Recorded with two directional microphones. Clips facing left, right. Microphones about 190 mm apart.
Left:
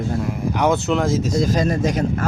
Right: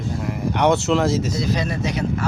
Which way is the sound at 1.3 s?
45° left (ahead or behind).